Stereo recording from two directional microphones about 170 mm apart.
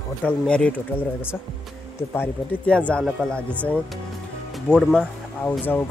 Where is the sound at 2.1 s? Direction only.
10° left (ahead or behind).